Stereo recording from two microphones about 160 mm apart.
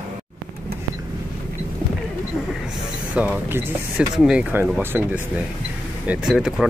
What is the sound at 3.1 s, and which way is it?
Speech, 10° right (ahead or behind).